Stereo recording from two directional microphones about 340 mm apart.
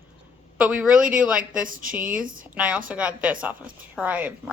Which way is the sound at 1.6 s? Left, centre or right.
Right.